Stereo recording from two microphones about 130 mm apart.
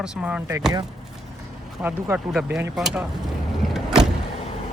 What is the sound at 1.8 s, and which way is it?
Speech, 10° right (ahead or behind).